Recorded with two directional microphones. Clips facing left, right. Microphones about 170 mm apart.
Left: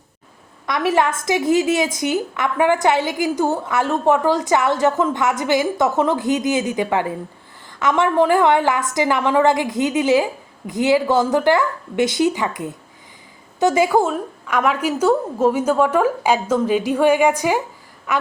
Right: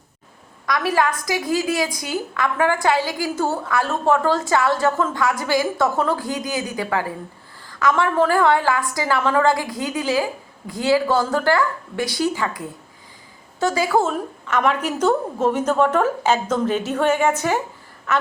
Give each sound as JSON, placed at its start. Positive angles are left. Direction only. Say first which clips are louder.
{"t": 0.6, "sound": "a woman's voice", "louder": "left 2 dB", "side_deg": 20}
{"t": 14.1, "sound": "a woman's voice", "louder": "left 1 dB", "side_deg": 5}